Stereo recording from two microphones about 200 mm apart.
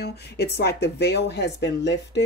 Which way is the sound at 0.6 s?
55° left (ahead or behind).